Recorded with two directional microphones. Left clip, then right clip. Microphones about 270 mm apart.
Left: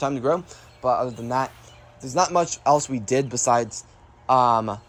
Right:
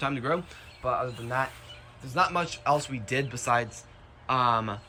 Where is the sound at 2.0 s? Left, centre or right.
Left.